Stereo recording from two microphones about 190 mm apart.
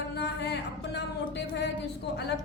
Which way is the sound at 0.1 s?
60° left (ahead or behind).